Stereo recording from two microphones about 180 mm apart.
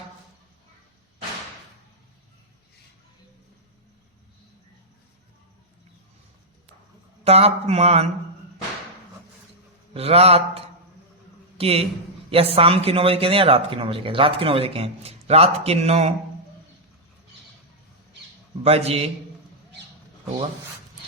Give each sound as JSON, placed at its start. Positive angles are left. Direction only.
{"t": 7.3, "sound": "speech", "side_deg": -35}
{"t": 9.9, "sound": "a man's voice", "side_deg": -35}
{"t": 18.6, "sound": "speech", "side_deg": -35}